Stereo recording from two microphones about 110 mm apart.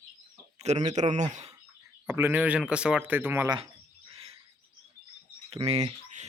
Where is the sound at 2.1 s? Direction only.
20° right (ahead or behind).